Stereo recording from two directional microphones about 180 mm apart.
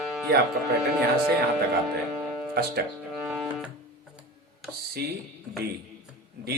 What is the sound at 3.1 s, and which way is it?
Music, 5° right (ahead or behind).